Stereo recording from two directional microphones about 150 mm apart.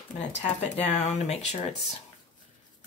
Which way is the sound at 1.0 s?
45° left (ahead or behind).